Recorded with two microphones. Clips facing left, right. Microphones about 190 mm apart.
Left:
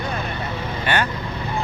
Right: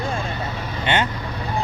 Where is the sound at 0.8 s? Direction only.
25° right (ahead or behind).